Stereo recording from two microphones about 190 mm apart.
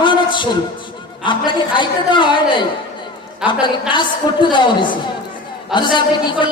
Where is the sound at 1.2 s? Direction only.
25° left (ahead or behind).